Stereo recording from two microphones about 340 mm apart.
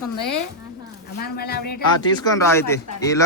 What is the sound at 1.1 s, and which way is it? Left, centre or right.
Speech, left.